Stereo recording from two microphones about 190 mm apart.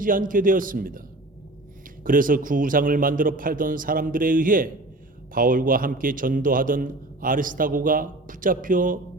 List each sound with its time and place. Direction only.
0.0 s a man's voice: 45° right (ahead or behind)
2.0 s a man's voice: 45° right (ahead or behind)